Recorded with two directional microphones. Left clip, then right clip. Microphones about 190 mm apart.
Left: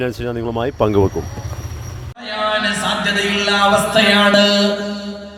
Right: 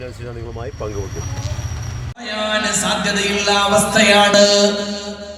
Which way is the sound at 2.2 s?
25° right (ahead or behind).